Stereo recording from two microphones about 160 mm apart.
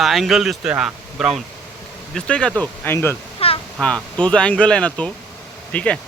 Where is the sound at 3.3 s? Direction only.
35° left (ahead or behind).